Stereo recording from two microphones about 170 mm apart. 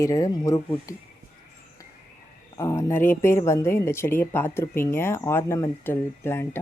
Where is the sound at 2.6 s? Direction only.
20° left (ahead or behind).